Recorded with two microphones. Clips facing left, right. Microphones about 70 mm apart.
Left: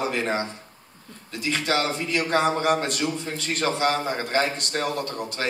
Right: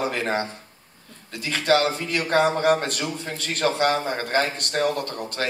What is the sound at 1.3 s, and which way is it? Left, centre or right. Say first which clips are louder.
A man's voice: right 4 dB; right.